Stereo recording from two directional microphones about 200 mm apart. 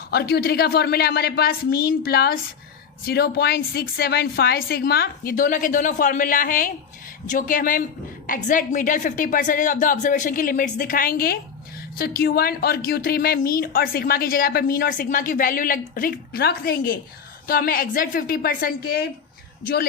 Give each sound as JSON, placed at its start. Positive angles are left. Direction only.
{"t": 0.1, "sound": "a woman's voice", "side_deg": 50}